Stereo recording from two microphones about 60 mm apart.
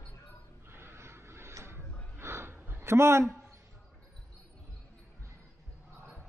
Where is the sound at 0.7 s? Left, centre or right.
Right.